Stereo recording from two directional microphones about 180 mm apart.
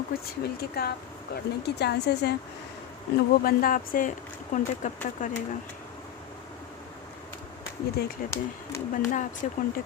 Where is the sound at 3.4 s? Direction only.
50° left (ahead or behind).